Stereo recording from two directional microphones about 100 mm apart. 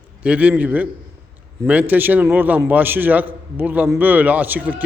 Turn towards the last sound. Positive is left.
turn(degrees=-15)  # may be behind; listen again after turning